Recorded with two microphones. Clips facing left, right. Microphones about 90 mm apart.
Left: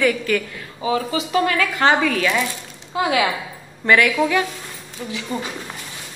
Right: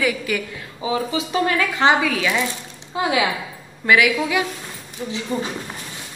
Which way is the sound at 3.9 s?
5° right (ahead or behind).